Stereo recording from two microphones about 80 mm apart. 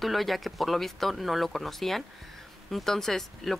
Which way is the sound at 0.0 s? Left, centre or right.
Centre.